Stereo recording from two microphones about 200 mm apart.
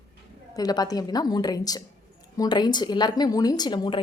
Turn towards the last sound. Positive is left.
turn(degrees=25)  # may be behind; listen again after turning